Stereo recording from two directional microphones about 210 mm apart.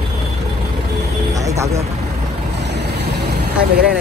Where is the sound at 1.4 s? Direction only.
15° right (ahead or behind).